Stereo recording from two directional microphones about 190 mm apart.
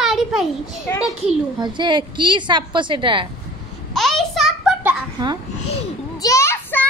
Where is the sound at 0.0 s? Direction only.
Centre (ahead or behind).